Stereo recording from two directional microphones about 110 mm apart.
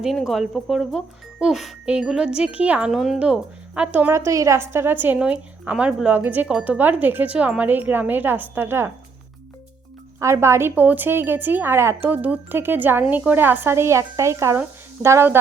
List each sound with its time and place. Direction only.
0.0 s a woman's voice: centre (ahead or behind)
4.1 s a woman's voice: 25° right (ahead or behind)
10.2 s a woman's voice: 25° right (ahead or behind)